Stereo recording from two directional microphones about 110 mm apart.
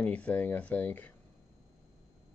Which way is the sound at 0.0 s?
10° left (ahead or behind).